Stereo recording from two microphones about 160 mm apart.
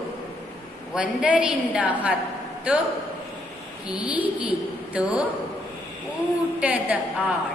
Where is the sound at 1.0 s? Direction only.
5° right (ahead or behind).